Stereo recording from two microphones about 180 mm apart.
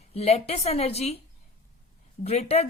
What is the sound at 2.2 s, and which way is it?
Speech, 35° left (ahead or behind).